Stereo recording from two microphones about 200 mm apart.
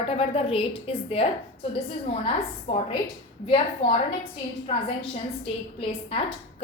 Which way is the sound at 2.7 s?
30° left (ahead or behind).